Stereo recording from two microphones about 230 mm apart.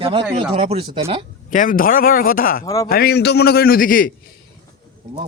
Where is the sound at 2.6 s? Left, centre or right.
Centre.